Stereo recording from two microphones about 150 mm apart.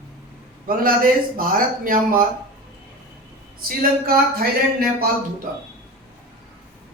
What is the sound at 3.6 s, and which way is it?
Speech, 85° right.